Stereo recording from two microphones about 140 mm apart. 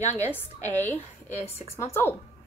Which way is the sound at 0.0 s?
50° left (ahead or behind).